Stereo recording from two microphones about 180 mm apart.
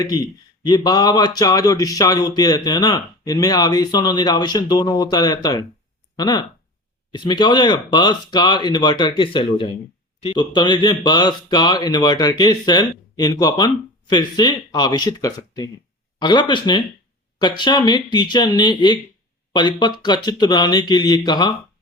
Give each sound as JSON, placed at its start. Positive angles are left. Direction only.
{"t": 0.0, "sound": "a man's voice", "side_deg": 20}